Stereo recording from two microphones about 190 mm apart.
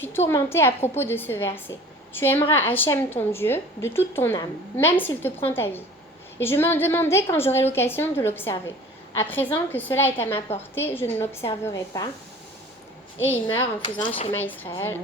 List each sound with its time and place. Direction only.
0.3 s a woman's voice: 15° left (ahead or behind)
13.1 s a woman's voice: 10° left (ahead or behind)
13.8 s speech: 25° left (ahead or behind)
14.3 s a woman's voice: 10° left (ahead or behind)